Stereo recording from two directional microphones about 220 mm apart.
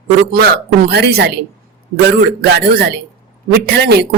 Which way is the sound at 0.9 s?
50° right (ahead or behind).